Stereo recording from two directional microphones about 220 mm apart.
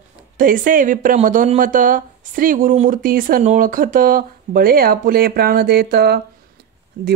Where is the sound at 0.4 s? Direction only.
40° right (ahead or behind).